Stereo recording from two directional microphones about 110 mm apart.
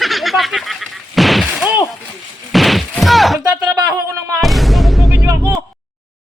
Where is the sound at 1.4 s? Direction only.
10° right (ahead or behind).